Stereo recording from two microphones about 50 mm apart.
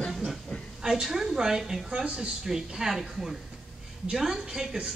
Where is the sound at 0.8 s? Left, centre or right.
Centre.